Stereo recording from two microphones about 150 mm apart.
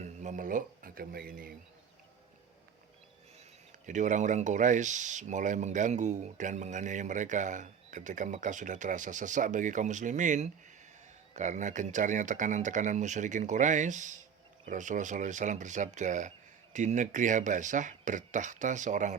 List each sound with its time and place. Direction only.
0.0 s speech: 55° right (ahead or behind); by 1.5 s 90° right
3.8 s speech: 55° right (ahead or behind)